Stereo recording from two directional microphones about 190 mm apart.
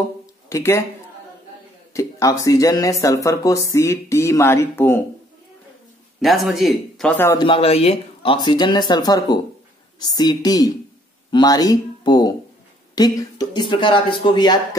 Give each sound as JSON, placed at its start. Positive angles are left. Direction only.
{"t": 0.5, "sound": "speech", "side_deg": 15}
{"t": 2.0, "sound": "speech", "side_deg": 15}
{"t": 6.2, "sound": "speech", "side_deg": 0}
{"t": 7.3, "sound": "speech", "side_deg": 25}